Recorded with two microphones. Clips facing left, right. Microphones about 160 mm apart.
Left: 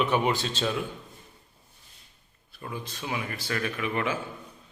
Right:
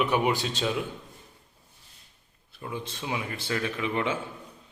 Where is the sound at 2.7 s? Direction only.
25° right (ahead or behind).